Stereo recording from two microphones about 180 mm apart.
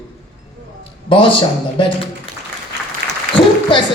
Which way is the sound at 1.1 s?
30° left (ahead or behind).